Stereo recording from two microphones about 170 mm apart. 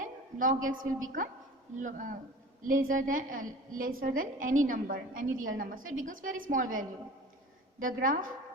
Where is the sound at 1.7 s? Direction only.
50° right (ahead or behind).